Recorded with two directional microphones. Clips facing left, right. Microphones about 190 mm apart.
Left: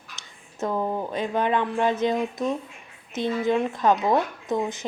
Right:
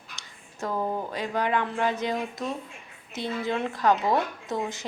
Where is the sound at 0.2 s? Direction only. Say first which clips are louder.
Left 5 dB; 20° left (ahead or behind).